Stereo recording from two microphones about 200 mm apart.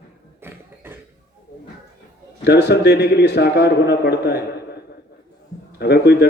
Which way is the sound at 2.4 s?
55° left (ahead or behind).